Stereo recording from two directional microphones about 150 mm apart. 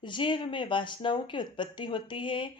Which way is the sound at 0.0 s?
30° left (ahead or behind).